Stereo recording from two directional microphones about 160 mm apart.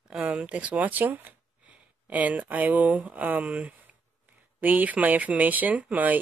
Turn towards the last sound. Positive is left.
turn(degrees=-10)  # may be behind; listen again after turning